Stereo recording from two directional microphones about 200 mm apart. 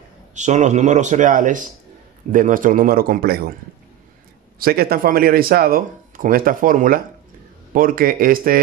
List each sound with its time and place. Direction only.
0.3 s speech: 35° right (ahead or behind)
4.6 s speech: 50° right (ahead or behind)